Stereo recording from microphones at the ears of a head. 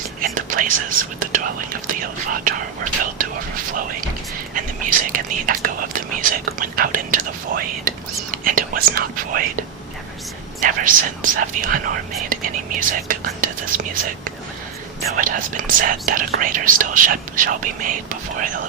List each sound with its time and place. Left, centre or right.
0.2 s speech: right